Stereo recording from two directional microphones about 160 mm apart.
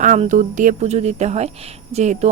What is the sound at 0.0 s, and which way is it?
A woman's voice, 50° right (ahead or behind).